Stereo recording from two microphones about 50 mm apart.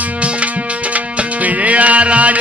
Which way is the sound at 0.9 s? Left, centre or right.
Right.